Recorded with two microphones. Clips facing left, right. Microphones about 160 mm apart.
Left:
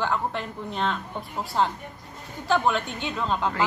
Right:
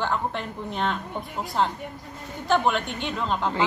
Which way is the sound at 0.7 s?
5° right (ahead or behind).